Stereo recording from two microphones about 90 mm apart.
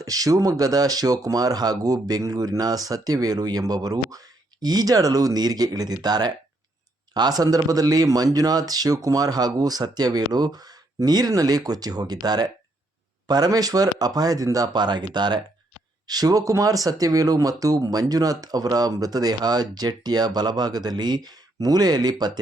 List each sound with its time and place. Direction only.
0.0 s speech: 40° right (ahead or behind)